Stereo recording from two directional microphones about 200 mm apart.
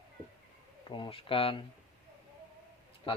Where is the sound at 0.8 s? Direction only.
25° left (ahead or behind).